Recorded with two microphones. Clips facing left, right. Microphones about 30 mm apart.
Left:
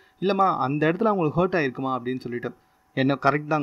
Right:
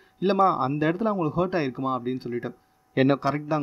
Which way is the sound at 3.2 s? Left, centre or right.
Left.